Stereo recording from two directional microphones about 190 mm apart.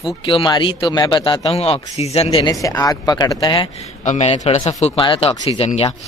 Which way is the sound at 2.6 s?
20° left (ahead or behind).